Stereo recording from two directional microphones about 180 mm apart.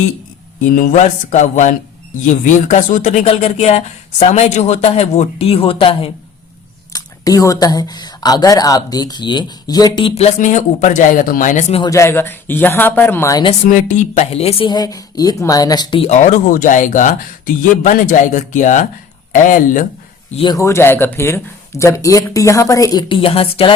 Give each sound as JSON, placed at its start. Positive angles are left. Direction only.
{"t": 0.8, "sound": "a woman's voice", "side_deg": 45}
{"t": 6.9, "sound": "speech", "side_deg": 20}
{"t": 11.8, "sound": "speech", "side_deg": 15}
{"t": 13.4, "sound": "a woman's voice", "side_deg": 35}
{"t": 20.3, "sound": "speech", "side_deg": 30}
{"t": 20.6, "sound": "speech", "side_deg": 15}